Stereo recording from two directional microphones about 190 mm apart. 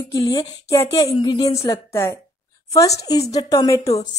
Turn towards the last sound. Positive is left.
turn(degrees=15)  # may be behind; listen again after turning